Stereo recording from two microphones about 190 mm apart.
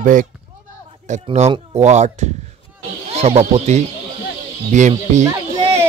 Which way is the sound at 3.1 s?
35° right (ahead or behind).